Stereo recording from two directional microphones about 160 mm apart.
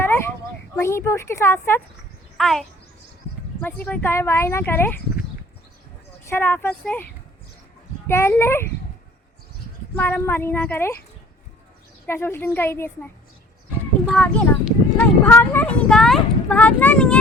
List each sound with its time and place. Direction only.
0.0 s a sound: 15° left (ahead or behind)
0.8 s speech: 15° left (ahead or behind)
2.4 s speech: centre (ahead or behind)
6.2 s speech: 15° left (ahead or behind)
9.9 s speech: 10° left (ahead or behind)
12.0 s speech: 15° left (ahead or behind)
14.1 s speech: 5° left (ahead or behind)